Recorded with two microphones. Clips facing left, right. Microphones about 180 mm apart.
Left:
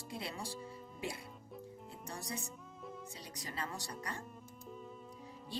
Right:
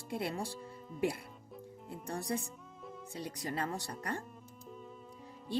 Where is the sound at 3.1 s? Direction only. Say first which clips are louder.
Right 12 dB; 55° right (ahead or behind).